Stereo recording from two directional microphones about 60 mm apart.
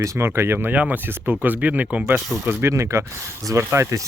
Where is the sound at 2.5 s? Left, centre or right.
Right.